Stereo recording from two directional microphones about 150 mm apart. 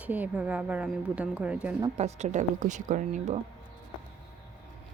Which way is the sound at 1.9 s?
50° right (ahead or behind).